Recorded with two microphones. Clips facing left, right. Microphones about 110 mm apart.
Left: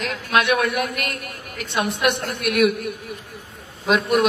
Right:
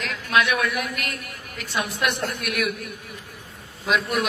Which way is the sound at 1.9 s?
65° left (ahead or behind).